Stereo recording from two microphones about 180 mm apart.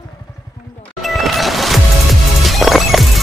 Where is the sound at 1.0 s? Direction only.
Centre (ahead or behind).